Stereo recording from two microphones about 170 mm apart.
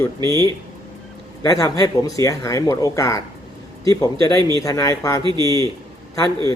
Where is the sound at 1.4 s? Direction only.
20° left (ahead or behind).